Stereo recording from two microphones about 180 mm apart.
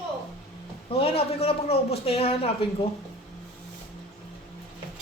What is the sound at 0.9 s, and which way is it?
A woman's voice, 30° left (ahead or behind).